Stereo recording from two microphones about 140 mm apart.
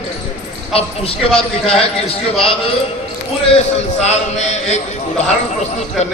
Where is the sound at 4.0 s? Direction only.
55° left (ahead or behind).